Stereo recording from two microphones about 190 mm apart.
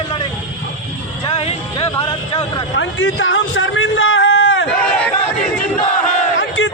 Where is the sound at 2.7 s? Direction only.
90° left.